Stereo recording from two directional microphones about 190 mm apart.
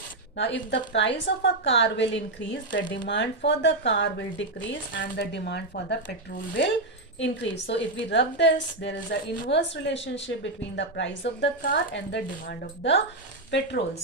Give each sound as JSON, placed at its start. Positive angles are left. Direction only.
{"t": 0.3, "sound": "speech", "side_deg": 65}